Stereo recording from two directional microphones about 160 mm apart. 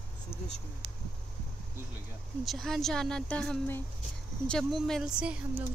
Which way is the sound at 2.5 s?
Centre (ahead or behind).